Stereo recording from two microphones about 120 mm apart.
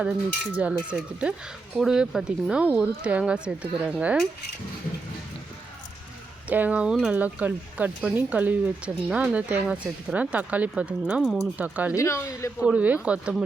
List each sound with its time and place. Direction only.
0.5 s speech: 10° right (ahead or behind)
6.5 s speech: 10° right (ahead or behind)
11.9 s speech: 25° left (ahead or behind)
12.5 s speech: 10° right (ahead or behind)